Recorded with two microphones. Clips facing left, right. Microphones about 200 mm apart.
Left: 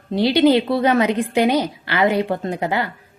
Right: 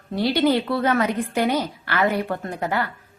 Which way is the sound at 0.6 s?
15° left (ahead or behind).